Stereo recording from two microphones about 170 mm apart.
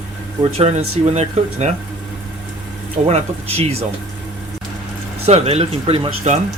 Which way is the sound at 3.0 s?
40° right (ahead or behind).